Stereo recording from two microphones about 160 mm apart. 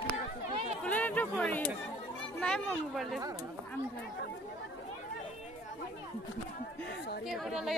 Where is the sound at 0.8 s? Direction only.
10° left (ahead or behind).